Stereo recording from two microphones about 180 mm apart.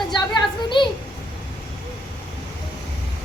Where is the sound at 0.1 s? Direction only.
25° left (ahead or behind).